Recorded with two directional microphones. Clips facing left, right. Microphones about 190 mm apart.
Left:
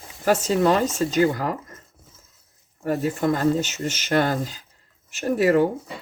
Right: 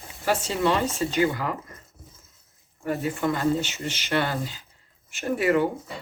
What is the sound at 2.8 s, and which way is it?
Speech, 40° left (ahead or behind).